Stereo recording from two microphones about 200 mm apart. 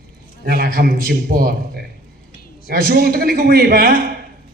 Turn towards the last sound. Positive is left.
turn(degrees=-50)  # may be behind; listen again after turning